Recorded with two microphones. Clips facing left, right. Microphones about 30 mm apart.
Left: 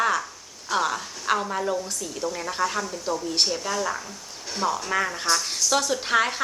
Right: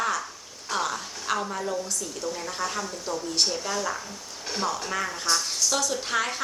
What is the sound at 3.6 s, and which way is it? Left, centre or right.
Speech, centre.